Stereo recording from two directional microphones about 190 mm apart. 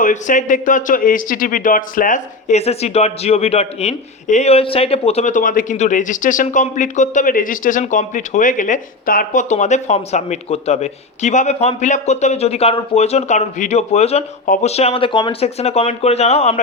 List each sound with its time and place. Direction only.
0.0 s speech: 40° left (ahead or behind)